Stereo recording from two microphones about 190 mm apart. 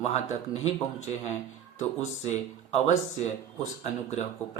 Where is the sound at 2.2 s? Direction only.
40° left (ahead or behind).